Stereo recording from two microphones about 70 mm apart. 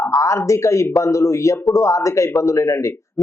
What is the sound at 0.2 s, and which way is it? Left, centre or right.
A man's voice, left.